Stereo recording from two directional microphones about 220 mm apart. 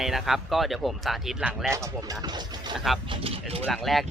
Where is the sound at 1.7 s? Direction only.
15° right (ahead or behind).